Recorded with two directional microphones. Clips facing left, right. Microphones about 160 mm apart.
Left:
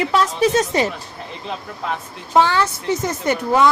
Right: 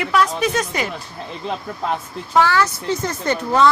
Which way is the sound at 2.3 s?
20° left (ahead or behind).